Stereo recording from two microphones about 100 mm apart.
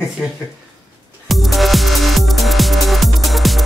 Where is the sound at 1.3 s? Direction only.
Centre (ahead or behind).